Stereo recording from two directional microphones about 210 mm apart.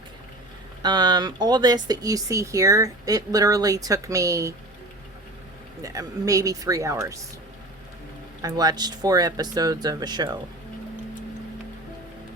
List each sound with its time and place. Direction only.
0.8 s speech: 20° right (ahead or behind)
5.8 s speech: 15° right (ahead or behind)
8.4 s speech: 20° right (ahead or behind)